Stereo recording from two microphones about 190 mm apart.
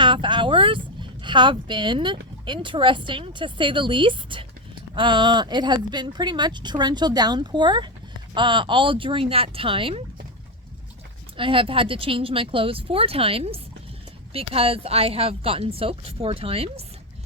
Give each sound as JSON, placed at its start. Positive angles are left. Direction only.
{"t": 0.0, "sound": "vehicle", "side_deg": -25}
{"t": 2.5, "sound": "speech", "side_deg": -25}
{"t": 11.3, "sound": "speech", "side_deg": -30}